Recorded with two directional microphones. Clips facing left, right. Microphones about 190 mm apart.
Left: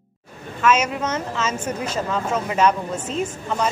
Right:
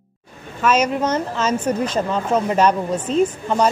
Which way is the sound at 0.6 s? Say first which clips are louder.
Right 2 dB; 35° right (ahead or behind).